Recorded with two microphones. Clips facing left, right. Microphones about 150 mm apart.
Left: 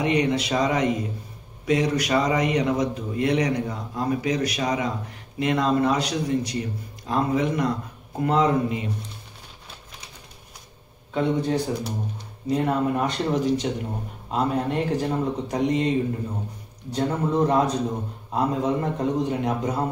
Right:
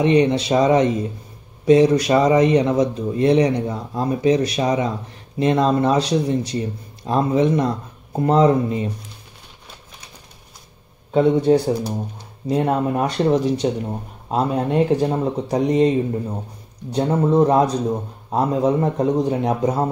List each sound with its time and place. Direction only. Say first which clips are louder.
0.0 s a man's voice: right 6 dB; 25° right (ahead or behind)
11.1 s speech: right 8 dB; 30° right (ahead or behind)
16.9 s speech: right 6 dB; 30° right (ahead or behind)